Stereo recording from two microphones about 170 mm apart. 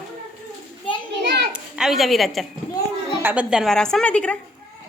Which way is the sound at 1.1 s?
90° right.